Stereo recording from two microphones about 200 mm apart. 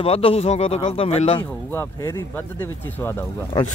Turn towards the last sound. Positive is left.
turn(degrees=15)  # may be behind; listen again after turning